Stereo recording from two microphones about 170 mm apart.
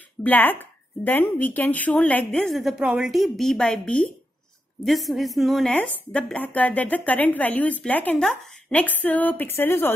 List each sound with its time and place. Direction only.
0.2 s a woman's voice: 10° left (ahead or behind)